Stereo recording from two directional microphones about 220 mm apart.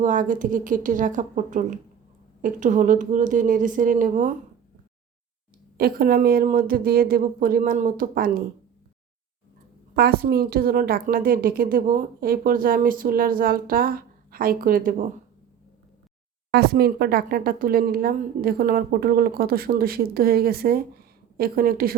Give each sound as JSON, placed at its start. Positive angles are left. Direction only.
{"t": 0.0, "sound": "a woman's voice", "side_deg": -35}
{"t": 5.7, "sound": "a woman's voice", "side_deg": -40}
{"t": 9.9, "sound": "a woman's voice", "side_deg": -45}
{"t": 16.5, "sound": "speech", "side_deg": -45}